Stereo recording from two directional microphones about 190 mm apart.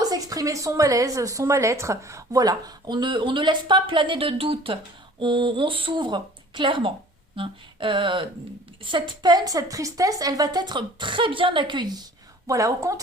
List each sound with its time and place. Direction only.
0.0 s a woman's voice: 20° right (ahead or behind)